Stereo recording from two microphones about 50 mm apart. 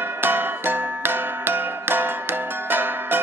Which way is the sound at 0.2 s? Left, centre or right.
Right.